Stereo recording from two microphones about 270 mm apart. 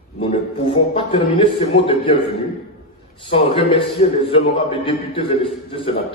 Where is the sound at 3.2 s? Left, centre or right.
Centre.